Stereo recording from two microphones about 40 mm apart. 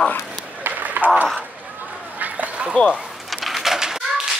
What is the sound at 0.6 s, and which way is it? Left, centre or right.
Run, right.